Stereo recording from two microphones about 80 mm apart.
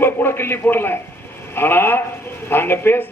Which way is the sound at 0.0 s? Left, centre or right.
Left.